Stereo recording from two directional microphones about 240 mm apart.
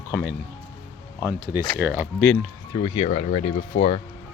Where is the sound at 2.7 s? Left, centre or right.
Left.